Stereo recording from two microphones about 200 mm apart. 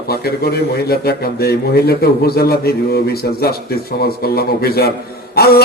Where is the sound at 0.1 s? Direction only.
50° left (ahead or behind).